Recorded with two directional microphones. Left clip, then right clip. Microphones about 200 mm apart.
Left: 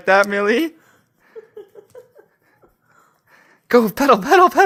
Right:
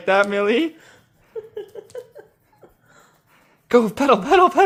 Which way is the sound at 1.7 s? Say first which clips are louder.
Right 6 dB; 40° right (ahead or behind).